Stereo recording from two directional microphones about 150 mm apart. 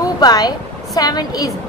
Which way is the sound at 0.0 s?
25° left (ahead or behind).